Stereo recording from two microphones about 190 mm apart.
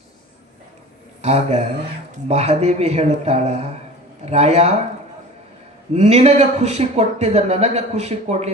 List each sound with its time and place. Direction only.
1.2 s speech: 35° right (ahead or behind)
5.9 s speech: 35° right (ahead or behind)